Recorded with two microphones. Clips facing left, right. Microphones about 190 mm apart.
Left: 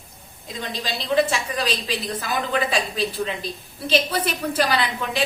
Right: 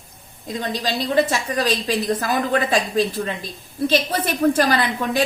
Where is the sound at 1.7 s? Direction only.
45° right (ahead or behind).